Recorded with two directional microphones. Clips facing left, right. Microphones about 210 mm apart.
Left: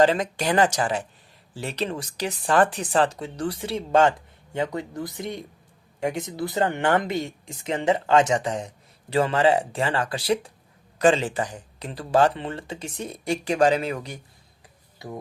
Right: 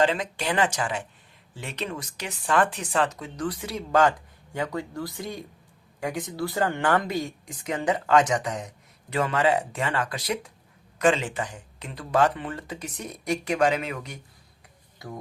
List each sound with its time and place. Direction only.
0.0 s speech: 40° left (ahead or behind)